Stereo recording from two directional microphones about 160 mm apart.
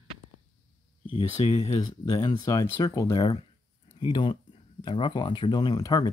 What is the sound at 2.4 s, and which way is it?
Speech, 20° left (ahead or behind).